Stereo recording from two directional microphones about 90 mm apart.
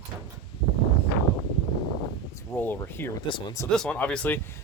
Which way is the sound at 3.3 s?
65° left (ahead or behind).